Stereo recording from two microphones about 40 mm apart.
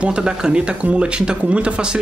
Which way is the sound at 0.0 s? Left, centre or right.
Centre.